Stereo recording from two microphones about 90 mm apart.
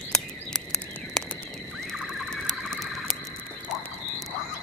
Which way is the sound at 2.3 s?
5° left (ahead or behind).